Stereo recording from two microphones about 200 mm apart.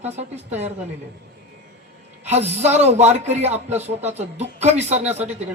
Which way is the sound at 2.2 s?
35° right (ahead or behind).